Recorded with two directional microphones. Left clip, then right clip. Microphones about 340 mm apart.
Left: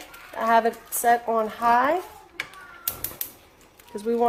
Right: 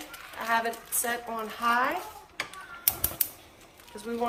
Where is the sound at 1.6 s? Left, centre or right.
Left.